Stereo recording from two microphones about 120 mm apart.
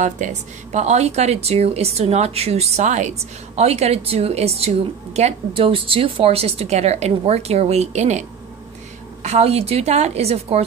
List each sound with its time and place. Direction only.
0.0 s a woman's voice: 85° right
3.5 s a woman's voice: 60° right (ahead or behind)
9.2 s a woman's voice: 65° right (ahead or behind)